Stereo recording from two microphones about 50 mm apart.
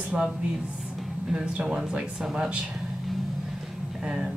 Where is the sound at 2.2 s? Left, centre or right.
Centre.